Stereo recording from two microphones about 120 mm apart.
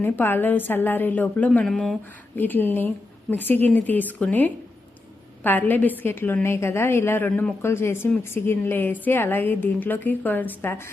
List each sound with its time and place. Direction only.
0.0 s a woman's voice: 15° left (ahead or behind)
1.6 s speech: centre (ahead or behind)
2.3 s a woman's voice: 15° left (ahead or behind)